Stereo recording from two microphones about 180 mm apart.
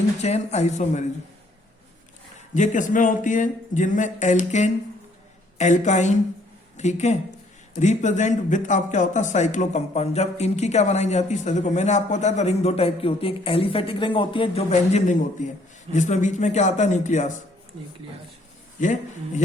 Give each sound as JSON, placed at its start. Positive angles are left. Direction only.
{"t": 0.2, "sound": "speech", "side_deg": 40}
{"t": 2.6, "sound": "speech", "side_deg": 45}